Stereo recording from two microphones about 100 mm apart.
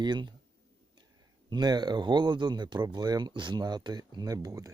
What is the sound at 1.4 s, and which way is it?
Speech, 45° right (ahead or behind).